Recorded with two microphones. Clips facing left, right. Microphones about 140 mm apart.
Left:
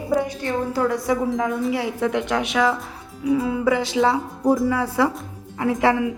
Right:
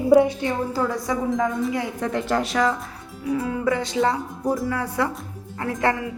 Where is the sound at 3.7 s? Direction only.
90° left.